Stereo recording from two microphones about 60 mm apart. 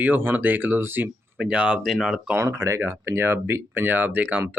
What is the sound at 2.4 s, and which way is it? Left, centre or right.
Speech, right.